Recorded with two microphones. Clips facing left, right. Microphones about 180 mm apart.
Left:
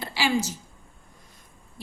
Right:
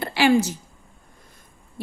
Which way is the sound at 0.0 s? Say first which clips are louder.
Right 7 dB; 60° right (ahead or behind).